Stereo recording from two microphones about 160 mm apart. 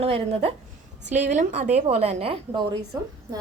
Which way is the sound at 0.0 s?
35° right (ahead or behind).